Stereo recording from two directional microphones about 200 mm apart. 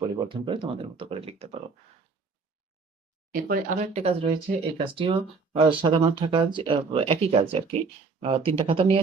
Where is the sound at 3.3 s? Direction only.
45° right (ahead or behind).